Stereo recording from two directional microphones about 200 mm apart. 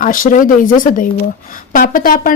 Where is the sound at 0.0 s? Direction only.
40° left (ahead or behind).